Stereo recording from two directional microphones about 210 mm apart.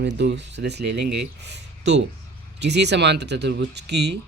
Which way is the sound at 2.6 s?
55° right (ahead or behind).